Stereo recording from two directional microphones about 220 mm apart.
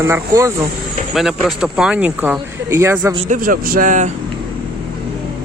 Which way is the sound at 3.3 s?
40° right (ahead or behind).